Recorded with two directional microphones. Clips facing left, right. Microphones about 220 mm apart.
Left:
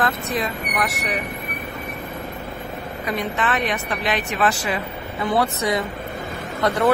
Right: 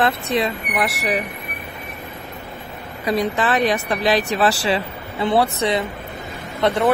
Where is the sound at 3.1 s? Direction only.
35° right (ahead or behind).